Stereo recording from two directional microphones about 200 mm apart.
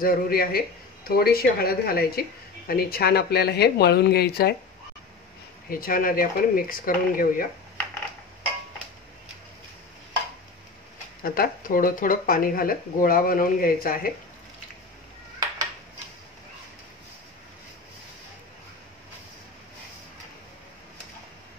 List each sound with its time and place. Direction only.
0.0 s speech: 45° left (ahead or behind)
5.7 s speech: 45° left (ahead or behind)
11.2 s speech: 45° left (ahead or behind)